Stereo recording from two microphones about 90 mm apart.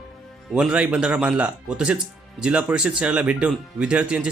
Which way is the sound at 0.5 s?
10° right (ahead or behind).